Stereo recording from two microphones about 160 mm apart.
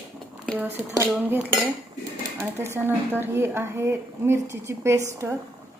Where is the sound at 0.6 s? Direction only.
10° right (ahead or behind).